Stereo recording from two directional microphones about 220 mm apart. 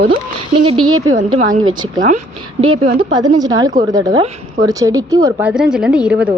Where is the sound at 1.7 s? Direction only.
20° right (ahead or behind).